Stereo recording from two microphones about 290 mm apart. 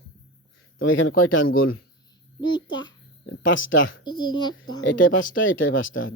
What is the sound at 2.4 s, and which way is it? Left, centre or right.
Speech, centre.